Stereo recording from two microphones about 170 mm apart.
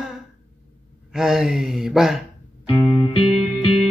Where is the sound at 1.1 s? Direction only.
5° right (ahead or behind).